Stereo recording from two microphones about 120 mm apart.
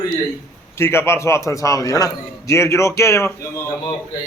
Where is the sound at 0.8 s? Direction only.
20° left (ahead or behind).